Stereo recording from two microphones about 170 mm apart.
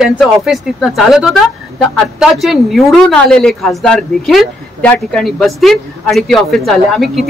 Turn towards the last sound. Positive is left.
turn(degrees=0)  # may be behind; listen again after turning